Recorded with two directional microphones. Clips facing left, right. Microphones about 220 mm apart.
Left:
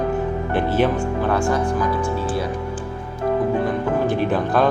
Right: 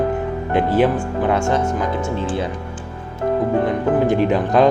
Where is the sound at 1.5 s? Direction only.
25° right (ahead or behind).